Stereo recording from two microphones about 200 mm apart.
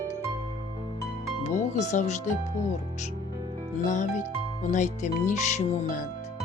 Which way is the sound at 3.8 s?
40° left (ahead or behind).